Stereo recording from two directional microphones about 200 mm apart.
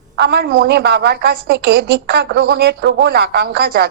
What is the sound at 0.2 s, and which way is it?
A woman's voice, 50° right (ahead or behind).